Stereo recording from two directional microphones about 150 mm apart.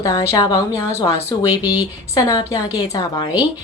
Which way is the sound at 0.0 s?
20° left (ahead or behind).